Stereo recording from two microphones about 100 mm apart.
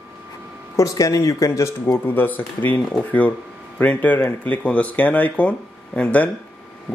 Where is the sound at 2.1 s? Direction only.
20° left (ahead or behind).